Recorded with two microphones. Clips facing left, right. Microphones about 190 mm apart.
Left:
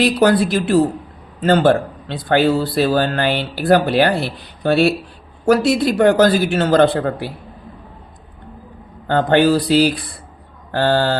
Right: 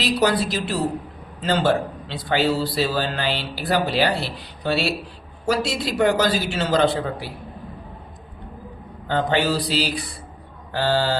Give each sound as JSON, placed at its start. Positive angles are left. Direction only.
{"t": 0.0, "sound": "speech", "side_deg": 55}
{"t": 9.0, "sound": "speech", "side_deg": 55}